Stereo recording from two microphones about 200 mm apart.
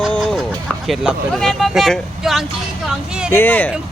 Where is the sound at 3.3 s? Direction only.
10° left (ahead or behind).